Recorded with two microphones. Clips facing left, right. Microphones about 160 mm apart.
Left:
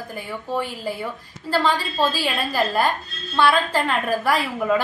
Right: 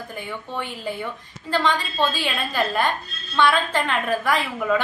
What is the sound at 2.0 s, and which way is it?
Speech, 35° left (ahead or behind).